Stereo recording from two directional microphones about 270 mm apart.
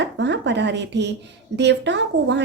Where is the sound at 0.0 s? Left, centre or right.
Right.